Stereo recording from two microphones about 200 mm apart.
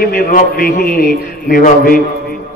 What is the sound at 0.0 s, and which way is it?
A man's voice, 45° left (ahead or behind).